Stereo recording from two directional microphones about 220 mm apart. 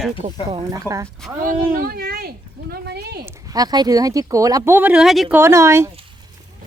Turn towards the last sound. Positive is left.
turn(degrees=-10)  # may be behind; listen again after turning